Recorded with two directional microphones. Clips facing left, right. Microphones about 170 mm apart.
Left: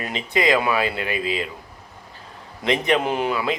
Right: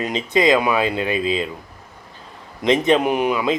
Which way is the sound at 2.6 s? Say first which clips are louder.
Right 4 dB; 20° right (ahead or behind).